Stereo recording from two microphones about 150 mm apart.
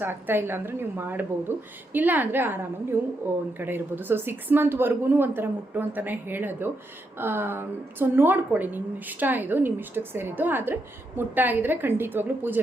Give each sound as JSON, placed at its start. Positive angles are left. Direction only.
{"t": 0.0, "sound": "a woman's voice", "side_deg": -15}